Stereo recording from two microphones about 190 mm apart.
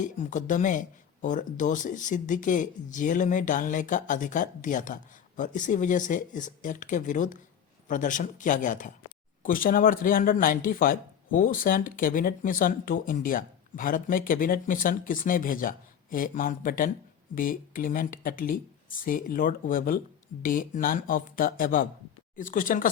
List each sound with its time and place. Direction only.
0.0 s speech: 40° left (ahead or behind)